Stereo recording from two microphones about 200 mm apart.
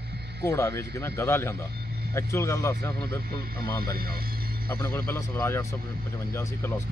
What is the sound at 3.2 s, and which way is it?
A man's voice, 50° right (ahead or behind).